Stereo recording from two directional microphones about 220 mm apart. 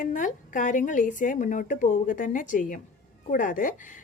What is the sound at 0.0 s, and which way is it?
A woman's voice, 35° left (ahead or behind).